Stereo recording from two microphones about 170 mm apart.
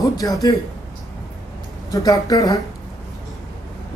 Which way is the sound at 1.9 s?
20° left (ahead or behind).